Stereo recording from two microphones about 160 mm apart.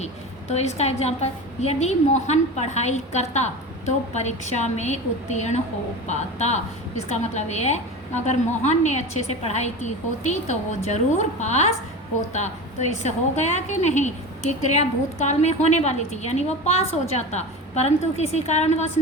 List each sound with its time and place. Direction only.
0.0 s a woman's voice: 45° left (ahead or behind)